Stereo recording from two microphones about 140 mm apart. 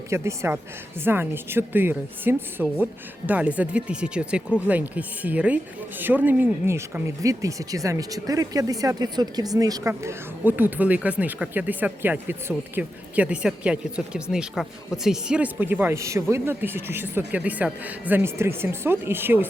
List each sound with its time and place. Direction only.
0.1 s a woman's voice: 20° right (ahead or behind)